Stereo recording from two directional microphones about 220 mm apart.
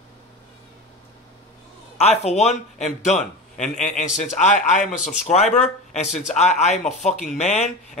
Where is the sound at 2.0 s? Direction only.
30° left (ahead or behind).